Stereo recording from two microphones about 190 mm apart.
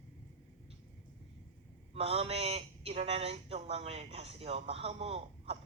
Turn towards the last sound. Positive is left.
turn(degrees=-35)  # may be behind; listen again after turning